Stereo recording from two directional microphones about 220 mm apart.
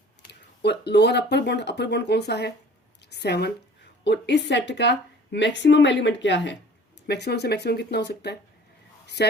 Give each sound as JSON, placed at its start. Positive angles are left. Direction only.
{"t": 0.3, "sound": "a woman's voice", "side_deg": 50}
{"t": 3.0, "sound": "a sound", "side_deg": 50}
{"t": 4.0, "sound": "a woman's voice", "side_deg": 55}